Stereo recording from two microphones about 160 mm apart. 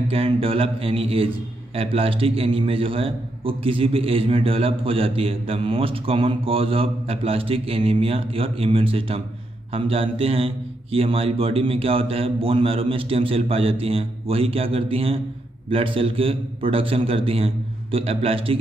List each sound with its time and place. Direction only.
0.1 s a man's voice: 35° right (ahead or behind)